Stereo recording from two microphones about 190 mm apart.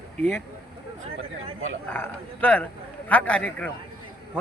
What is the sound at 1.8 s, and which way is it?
A man's voice, 10° left (ahead or behind).